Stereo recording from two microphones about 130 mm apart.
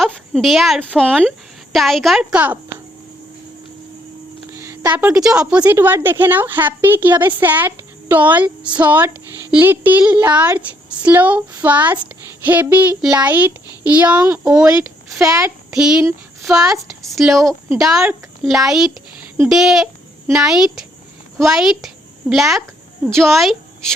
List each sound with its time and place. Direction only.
0.0 s a sound: centre (ahead or behind)
0.9 s speech: 5° left (ahead or behind)
2.4 s a sound: 15° right (ahead or behind)
4.5 s a sound: 20° right (ahead or behind)
5.2 s a woman's voice: 5° right (ahead or behind)
14.3 s a child's voice: 20° right (ahead or behind)
14.5 s speech: 10° right (ahead or behind)
15.2 s a child's voice: 25° right (ahead or behind)
15.7 s speech: 5° right (ahead or behind)